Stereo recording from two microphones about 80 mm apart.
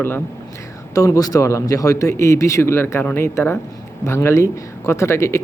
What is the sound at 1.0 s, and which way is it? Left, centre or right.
Speech, left.